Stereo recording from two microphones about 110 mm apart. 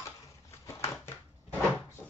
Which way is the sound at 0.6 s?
25° left (ahead or behind).